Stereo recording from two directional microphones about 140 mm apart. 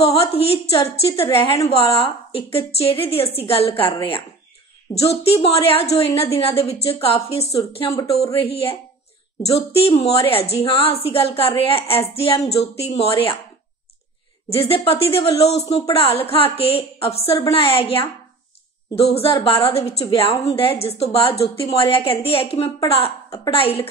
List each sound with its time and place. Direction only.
0.0 s a woman's voice: 45° left (ahead or behind)
4.9 s a woman's voice: 45° left (ahead or behind)
14.5 s a woman's voice: 45° left (ahead or behind)